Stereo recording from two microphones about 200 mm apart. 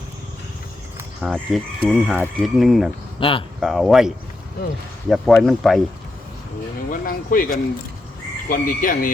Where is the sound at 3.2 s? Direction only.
25° left (ahead or behind).